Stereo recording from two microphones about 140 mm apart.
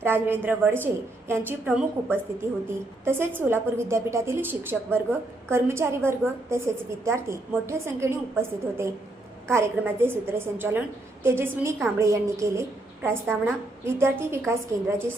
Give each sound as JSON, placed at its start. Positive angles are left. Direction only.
{"t": 0.0, "sound": "a woman's voice", "side_deg": -15}